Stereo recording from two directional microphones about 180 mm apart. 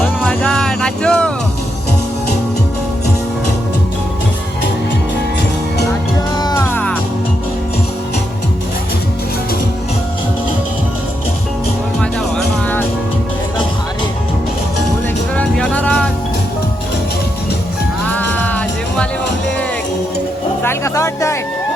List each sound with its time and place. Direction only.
0.0 s music: 5° left (ahead or behind)
6.3 s music: 20° left (ahead or behind)
11.9 s music: 5° left (ahead or behind)
15.4 s music: 5° left (ahead or behind)
18.0 s music: 10° left (ahead or behind)
20.6 s music: 15° left (ahead or behind)